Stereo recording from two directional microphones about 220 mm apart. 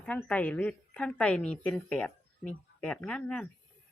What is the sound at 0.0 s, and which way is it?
A woman's voice, 5° left (ahead or behind).